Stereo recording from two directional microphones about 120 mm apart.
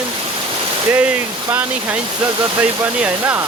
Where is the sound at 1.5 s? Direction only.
15° right (ahead or behind).